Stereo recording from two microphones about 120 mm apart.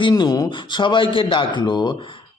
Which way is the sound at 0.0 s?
35° left (ahead or behind).